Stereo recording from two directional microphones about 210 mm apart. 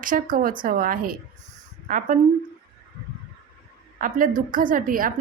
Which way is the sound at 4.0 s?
40° right (ahead or behind).